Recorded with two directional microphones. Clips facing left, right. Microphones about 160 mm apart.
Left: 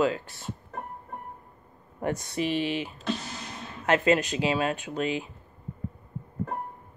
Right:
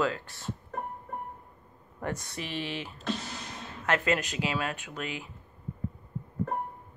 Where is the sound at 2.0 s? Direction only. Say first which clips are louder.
Left 7 dB; 20° left (ahead or behind).